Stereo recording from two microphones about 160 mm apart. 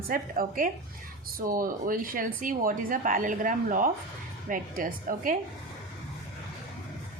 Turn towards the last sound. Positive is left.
turn(degrees=-60)  # may be behind; listen again after turning